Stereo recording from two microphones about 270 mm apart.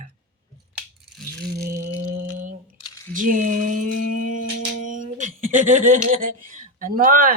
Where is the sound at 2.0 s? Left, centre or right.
Right.